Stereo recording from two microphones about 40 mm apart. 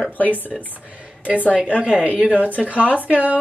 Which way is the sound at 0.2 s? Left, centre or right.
Left.